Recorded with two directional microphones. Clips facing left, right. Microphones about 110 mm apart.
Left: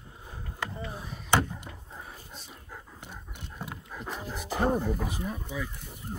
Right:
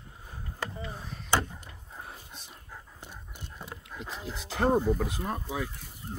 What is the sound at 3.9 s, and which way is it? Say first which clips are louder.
Dog: left 2 dB; 15° left (ahead or behind).